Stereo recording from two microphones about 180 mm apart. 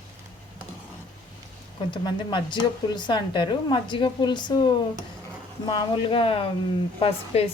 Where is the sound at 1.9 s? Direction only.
25° left (ahead or behind).